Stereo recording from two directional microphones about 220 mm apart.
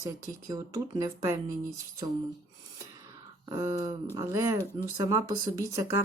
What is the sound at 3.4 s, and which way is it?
Speech, 15° right (ahead or behind).